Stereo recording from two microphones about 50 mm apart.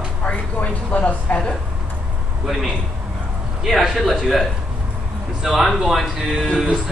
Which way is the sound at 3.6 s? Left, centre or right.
Centre.